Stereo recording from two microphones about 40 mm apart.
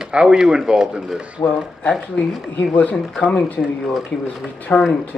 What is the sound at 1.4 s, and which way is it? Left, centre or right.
Speech, left.